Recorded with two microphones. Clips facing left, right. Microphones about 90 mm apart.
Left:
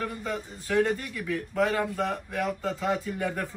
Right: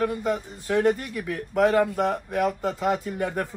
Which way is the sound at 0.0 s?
10° right (ahead or behind).